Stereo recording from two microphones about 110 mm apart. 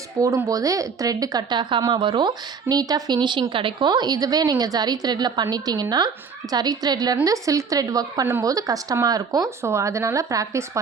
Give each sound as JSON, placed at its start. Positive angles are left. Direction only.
{"t": 0.2, "sound": "a woman's voice", "side_deg": -30}